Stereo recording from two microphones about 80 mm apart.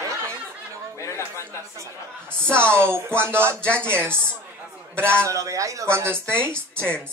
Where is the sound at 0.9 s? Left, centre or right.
Left.